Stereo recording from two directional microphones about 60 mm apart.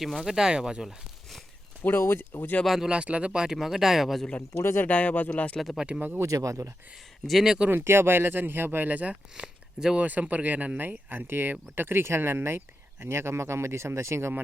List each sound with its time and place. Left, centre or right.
0.0 s speech: centre
1.8 s speech: left
2.6 s speech: centre
2.9 s speech: centre
4.6 s speech: left
4.9 s speech: left
5.5 s speech: centre
6.1 s speech: right
7.3 s speech: centre
7.7 s speech: right
9.3 s speech: centre; by 14.4 s right